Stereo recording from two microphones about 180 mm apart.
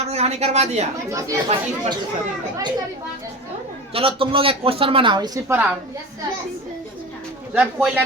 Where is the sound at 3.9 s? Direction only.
30° right (ahead or behind); by 5.7 s 10° right (ahead or behind).